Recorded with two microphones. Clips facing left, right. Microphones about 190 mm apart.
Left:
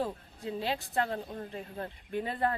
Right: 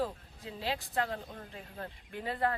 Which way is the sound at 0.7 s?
30° left (ahead or behind).